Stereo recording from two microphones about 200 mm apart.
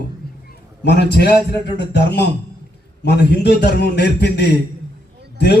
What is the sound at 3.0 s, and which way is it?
A man's voice, 55° left (ahead or behind).